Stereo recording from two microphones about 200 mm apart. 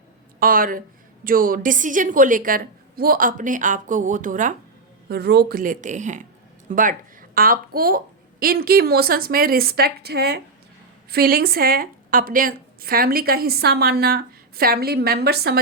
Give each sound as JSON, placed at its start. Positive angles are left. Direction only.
{"t": 0.3, "sound": "a woman's voice", "side_deg": -45}
{"t": 5.0, "sound": "a woman's voice", "side_deg": -50}